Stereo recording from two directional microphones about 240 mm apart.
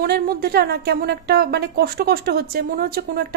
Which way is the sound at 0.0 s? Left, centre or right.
Right.